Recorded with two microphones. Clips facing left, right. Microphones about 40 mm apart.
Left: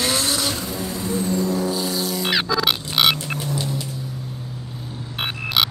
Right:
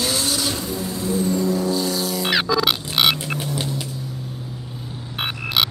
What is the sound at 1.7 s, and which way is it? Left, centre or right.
Music, centre.